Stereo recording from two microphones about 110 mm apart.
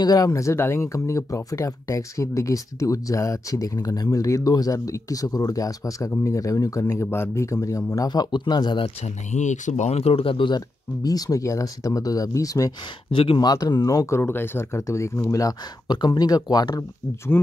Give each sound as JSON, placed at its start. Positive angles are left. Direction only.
{"t": 0.0, "sound": "speech", "side_deg": 35}
{"t": 9.0, "sound": "speech", "side_deg": 90}
{"t": 13.1, "sound": "speech", "side_deg": 55}
{"t": 13.4, "sound": "speech", "side_deg": 35}